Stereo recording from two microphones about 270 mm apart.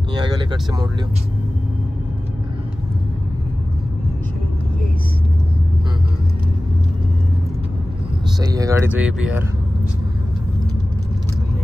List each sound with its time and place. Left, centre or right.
0.1 s vehicle: centre
8.4 s speech: centre